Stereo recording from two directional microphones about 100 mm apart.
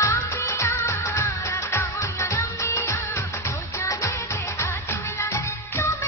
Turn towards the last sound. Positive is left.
turn(degrees=25)  # may be behind; listen again after turning